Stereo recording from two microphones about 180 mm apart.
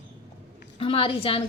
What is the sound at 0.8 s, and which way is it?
Speech, 30° left (ahead or behind).